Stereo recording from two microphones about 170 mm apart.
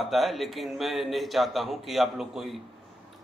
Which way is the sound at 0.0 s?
Centre (ahead or behind).